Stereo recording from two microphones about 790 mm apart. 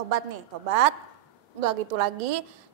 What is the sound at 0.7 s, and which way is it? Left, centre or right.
Speech, right.